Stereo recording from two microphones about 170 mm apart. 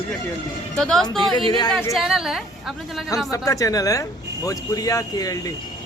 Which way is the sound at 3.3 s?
20° left (ahead or behind).